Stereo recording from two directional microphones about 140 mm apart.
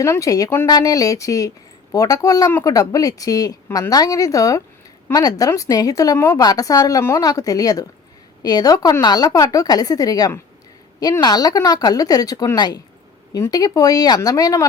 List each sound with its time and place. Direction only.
0.0 s a woman's voice: 25° left (ahead or behind)